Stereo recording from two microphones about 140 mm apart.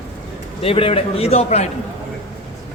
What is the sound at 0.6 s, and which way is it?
A man's voice, 45° left (ahead or behind).